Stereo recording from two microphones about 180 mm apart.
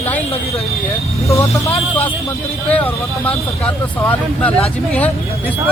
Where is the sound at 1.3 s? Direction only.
15° left (ahead or behind).